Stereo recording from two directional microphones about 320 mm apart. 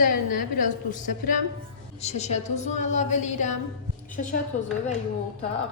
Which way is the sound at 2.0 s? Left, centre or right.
Centre.